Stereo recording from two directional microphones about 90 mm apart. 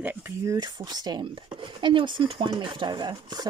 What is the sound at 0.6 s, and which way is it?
Speech, 50° right (ahead or behind).